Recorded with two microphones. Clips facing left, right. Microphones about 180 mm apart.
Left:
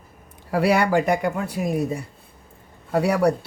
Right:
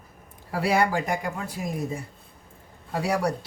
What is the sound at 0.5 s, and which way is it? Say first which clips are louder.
Speech: left 5 dB; 70° left (ahead or behind).